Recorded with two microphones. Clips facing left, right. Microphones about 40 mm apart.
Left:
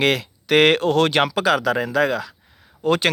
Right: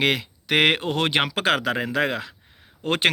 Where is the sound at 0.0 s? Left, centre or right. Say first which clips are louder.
Left 3 dB; centre.